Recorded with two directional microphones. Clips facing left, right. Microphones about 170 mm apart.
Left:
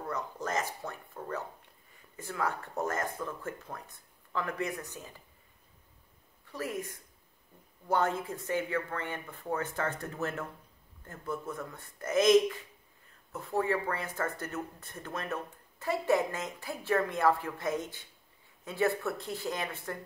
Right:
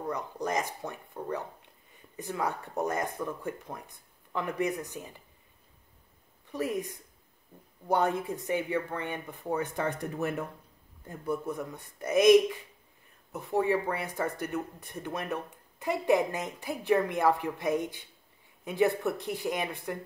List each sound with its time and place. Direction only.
0.0 s speech: 15° right (ahead or behind)
6.5 s speech: 20° right (ahead or behind)